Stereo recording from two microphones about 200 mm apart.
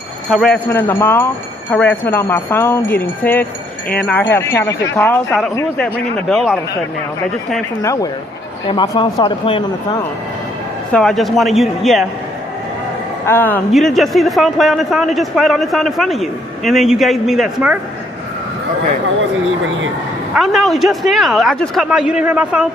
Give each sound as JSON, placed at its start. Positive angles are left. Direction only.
{"t": 0.3, "sound": "speech", "side_deg": 5}
{"t": 7.8, "sound": "speech", "side_deg": 15}
{"t": 10.9, "sound": "a man's voice", "side_deg": 0}
{"t": 13.2, "sound": "a man's voice", "side_deg": 10}
{"t": 20.3, "sound": "a man's voice", "side_deg": 0}